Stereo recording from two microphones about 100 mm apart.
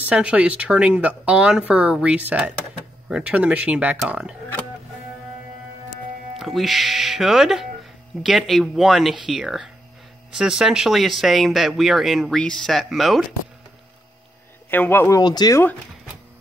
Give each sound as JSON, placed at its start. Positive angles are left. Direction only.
{"t": 0.1, "sound": "speech", "side_deg": -10}
{"t": 6.3, "sound": "speech", "side_deg": 0}
{"t": 14.7, "sound": "speech", "side_deg": 20}
{"t": 15.1, "sound": "speech", "side_deg": 40}